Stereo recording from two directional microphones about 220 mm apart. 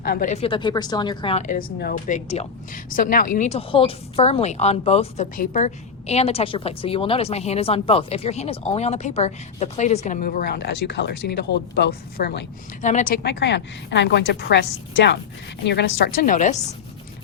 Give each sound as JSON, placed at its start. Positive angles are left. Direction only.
{"t": 0.0, "sound": "a woman's voice", "side_deg": 40}
{"t": 12.8, "sound": "a woman's voice", "side_deg": 35}